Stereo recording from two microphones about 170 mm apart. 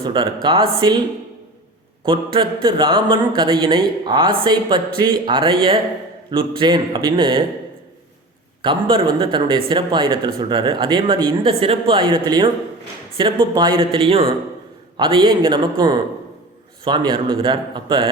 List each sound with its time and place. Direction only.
0.0 s speech: 30° right (ahead or behind)
2.0 s speech: 30° right (ahead or behind)
8.6 s speech: 30° right (ahead or behind)